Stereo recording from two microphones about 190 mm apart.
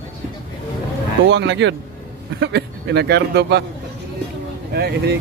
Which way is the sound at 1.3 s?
70° right (ahead or behind).